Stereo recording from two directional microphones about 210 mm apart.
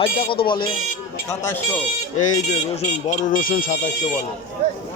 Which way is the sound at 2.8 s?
35° left (ahead or behind).